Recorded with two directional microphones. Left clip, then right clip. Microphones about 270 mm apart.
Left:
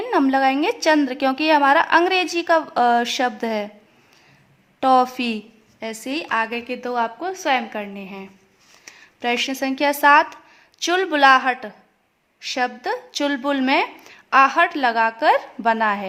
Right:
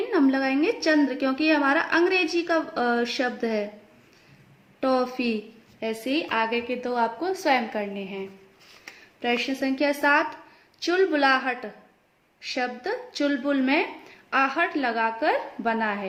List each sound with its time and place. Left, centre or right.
0.1 s a woman's voice: left
4.8 s a woman's voice: left